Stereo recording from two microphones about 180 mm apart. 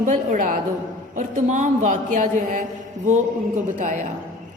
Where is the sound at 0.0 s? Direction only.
45° right (ahead or behind).